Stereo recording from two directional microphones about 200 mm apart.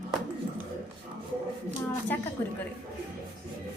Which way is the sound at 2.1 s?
10° left (ahead or behind).